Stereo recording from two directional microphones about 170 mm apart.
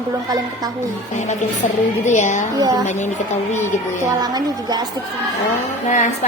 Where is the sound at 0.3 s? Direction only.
20° right (ahead or behind).